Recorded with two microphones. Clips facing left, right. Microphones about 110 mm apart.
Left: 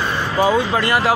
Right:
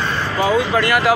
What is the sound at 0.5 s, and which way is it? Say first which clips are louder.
Speech: right 1 dB; 30° left (ahead or behind).